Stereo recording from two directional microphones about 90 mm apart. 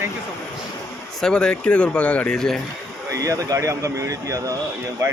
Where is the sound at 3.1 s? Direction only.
40° right (ahead or behind).